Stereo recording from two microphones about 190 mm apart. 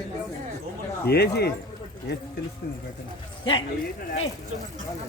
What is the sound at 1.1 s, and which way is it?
Speech, 55° left (ahead or behind).